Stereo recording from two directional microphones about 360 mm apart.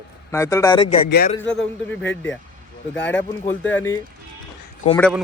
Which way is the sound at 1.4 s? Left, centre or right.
Centre.